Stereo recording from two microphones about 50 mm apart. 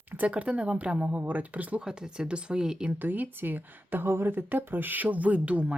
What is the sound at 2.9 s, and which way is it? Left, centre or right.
Speech, right.